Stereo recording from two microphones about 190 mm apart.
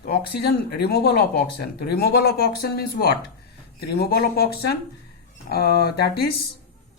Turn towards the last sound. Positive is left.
turn(degrees=55)  # may be behind; listen again after turning